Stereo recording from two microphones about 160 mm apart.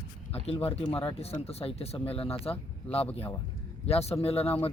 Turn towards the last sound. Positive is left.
turn(degrees=40)  # may be behind; listen again after turning